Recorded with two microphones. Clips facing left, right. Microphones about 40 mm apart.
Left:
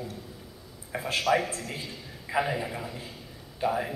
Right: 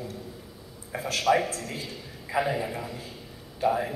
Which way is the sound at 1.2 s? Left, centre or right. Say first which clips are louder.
Right 3 dB; centre.